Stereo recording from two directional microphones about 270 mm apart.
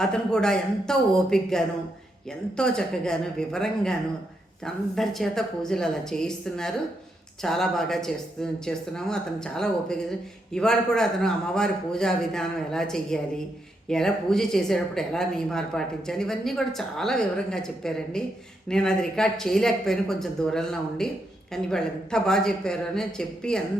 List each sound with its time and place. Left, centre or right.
0.0 s speech: centre